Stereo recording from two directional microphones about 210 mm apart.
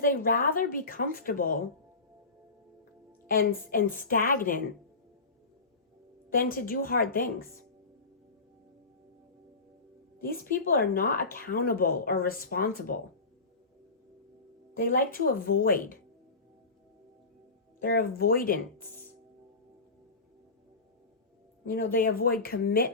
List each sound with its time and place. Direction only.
0.0 s speech: 40° left (ahead or behind)
3.7 s speech: 40° left (ahead or behind)
6.3 s speech: 45° left (ahead or behind)
10.2 s speech: 45° left (ahead or behind)
14.8 s speech: 40° left (ahead or behind)
17.7 s speech: 45° left (ahead or behind)
21.9 s speech: 40° left (ahead or behind)